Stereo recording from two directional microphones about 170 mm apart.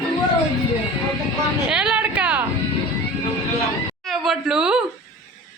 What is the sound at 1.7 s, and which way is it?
Speech, 5° right (ahead or behind).